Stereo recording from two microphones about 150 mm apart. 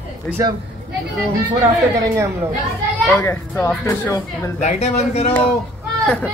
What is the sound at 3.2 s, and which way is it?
Speech, 15° left (ahead or behind).